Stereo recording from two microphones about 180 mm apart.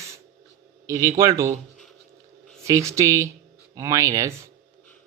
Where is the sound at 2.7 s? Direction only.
15° right (ahead or behind).